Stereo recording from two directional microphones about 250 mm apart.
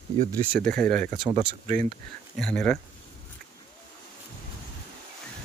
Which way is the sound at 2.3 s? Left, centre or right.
Centre.